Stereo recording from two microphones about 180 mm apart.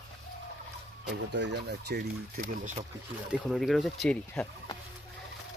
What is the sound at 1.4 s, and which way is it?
Speech, 65° right (ahead or behind).